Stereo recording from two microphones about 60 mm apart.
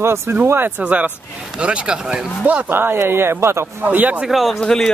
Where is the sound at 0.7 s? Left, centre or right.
Right.